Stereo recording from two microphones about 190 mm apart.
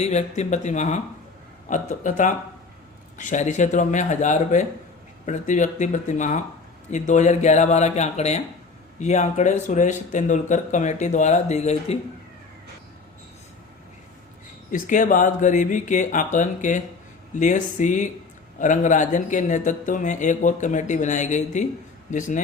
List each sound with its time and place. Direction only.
0.0 s speech: 35° left (ahead or behind)
14.7 s speech: 45° left (ahead or behind)